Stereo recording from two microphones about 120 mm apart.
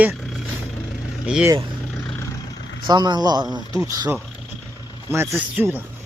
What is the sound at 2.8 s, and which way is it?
Speech, 35° right (ahead or behind).